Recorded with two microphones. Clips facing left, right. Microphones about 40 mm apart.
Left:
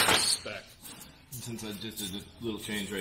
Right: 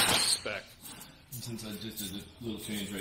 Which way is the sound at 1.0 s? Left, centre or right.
Left.